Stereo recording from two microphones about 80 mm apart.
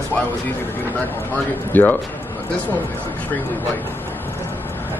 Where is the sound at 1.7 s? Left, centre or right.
Left.